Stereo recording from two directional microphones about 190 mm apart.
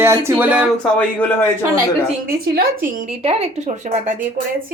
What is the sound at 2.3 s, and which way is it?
Speech, 50° right (ahead or behind).